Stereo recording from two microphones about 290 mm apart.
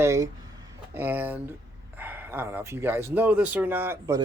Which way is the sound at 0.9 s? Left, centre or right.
Centre.